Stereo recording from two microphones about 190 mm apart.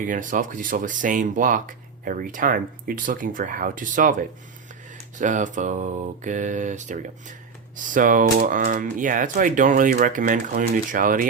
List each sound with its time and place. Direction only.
0.0 s speech: 45° right (ahead or behind)
5.1 s mantra: 40° right (ahead or behind)
7.8 s speech: 45° right (ahead or behind)